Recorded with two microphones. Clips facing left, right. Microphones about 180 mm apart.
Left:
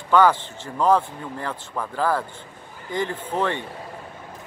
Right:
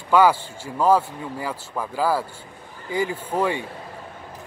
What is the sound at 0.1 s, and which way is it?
A man's voice, 10° right (ahead or behind).